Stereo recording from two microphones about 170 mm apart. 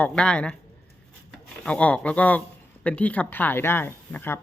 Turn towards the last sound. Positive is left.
turn(degrees=15)  # may be behind; listen again after turning